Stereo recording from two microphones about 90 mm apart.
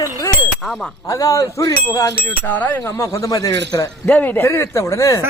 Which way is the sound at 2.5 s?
20° left (ahead or behind).